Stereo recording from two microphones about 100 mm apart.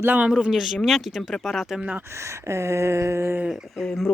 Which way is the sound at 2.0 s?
30° right (ahead or behind).